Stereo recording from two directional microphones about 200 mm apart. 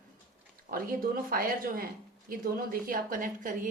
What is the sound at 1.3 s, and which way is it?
A woman's voice, 45° right (ahead or behind).